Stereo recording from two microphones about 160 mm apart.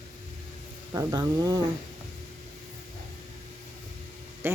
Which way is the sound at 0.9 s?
20° right (ahead or behind).